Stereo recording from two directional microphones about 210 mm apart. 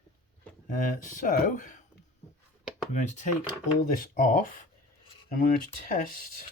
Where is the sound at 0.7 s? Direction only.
40° left (ahead or behind).